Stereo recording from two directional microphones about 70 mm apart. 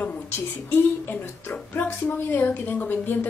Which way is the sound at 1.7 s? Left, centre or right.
Left.